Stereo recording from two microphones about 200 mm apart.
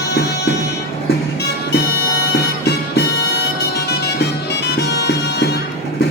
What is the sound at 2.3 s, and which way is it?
Music, 55° left (ahead or behind).